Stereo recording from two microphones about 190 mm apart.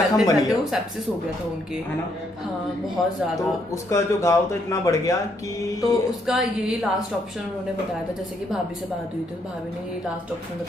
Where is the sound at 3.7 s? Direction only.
15° left (ahead or behind).